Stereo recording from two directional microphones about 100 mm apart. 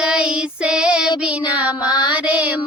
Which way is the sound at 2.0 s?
15° right (ahead or behind).